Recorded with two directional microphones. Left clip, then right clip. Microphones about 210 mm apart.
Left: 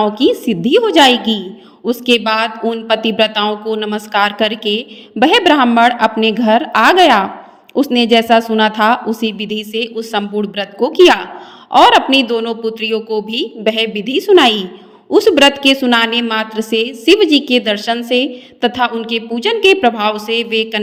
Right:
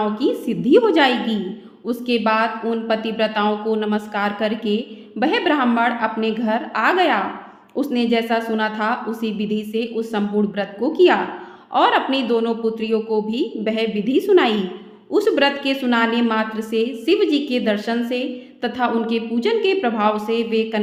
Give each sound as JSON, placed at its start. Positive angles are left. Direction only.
{"t": 0.0, "sound": "a woman's voice", "side_deg": 35}